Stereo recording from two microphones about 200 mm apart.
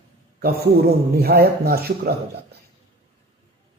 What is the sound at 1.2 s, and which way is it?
A man's voice, 50° right (ahead or behind).